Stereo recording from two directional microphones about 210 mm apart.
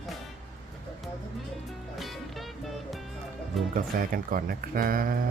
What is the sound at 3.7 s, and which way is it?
Speech, 40° right (ahead or behind).